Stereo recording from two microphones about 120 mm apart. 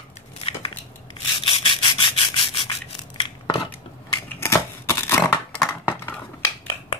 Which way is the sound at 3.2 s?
45° left (ahead or behind).